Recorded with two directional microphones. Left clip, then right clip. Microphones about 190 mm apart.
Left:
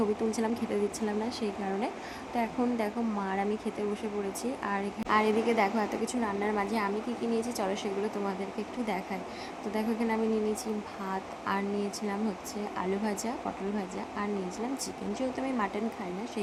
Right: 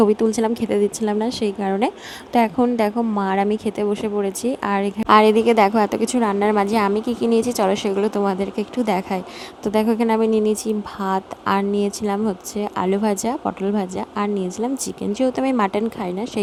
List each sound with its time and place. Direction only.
0.0 s a woman's voice: 45° right (ahead or behind)